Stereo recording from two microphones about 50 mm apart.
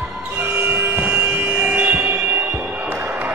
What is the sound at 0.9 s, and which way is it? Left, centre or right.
Vehicle, right.